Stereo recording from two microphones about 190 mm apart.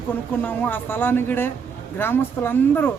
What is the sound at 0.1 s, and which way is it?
Speech, 10° left (ahead or behind).